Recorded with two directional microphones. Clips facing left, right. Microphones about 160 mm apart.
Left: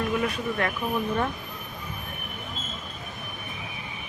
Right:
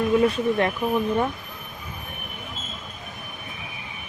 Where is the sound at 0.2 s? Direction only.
25° right (ahead or behind).